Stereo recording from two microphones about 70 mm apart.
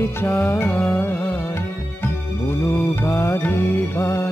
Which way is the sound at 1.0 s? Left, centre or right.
Left.